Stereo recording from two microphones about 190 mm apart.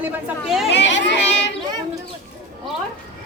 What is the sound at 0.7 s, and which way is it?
Speech, 70° left (ahead or behind).